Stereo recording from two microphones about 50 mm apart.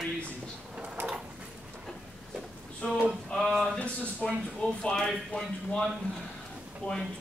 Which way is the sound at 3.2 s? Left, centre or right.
Centre.